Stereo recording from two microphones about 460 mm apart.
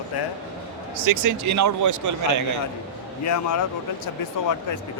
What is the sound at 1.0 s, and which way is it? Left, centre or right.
A man's voice, right.